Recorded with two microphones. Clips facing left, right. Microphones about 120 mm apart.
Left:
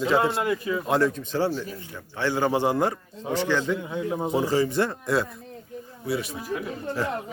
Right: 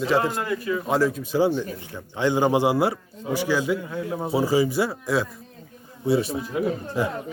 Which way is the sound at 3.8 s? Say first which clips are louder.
Left 1 dB; 20° left (ahead or behind).